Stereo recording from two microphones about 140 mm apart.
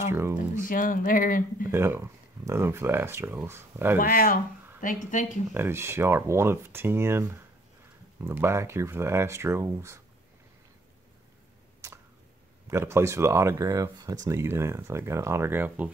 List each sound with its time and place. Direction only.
0.1 s speech: 20° right (ahead or behind)
0.7 s speech: 80° left
1.7 s speech: 15° right (ahead or behind)
4.0 s speech: 90° left
5.1 s speech: 65° left (ahead or behind)
5.5 s speech: 15° right (ahead or behind)
11.8 s a sound: 20° right (ahead or behind)
12.6 s speech: 20° right (ahead or behind)